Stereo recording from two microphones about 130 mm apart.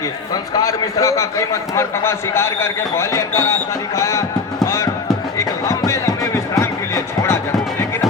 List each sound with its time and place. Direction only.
0.5 s a man's voice: 25° left (ahead or behind)
4.6 s a sound: 20° left (ahead or behind)
5.4 s music: 25° left (ahead or behind)